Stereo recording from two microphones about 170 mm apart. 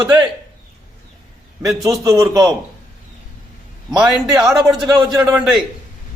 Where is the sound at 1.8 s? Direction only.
20° right (ahead or behind).